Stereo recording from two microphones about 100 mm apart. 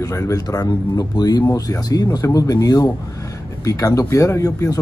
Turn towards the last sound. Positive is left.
turn(degrees=35)  # may be behind; listen again after turning